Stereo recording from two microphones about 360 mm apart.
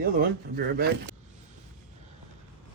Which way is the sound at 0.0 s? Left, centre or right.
Right.